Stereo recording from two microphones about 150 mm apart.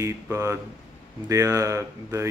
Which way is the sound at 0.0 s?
20° right (ahead or behind).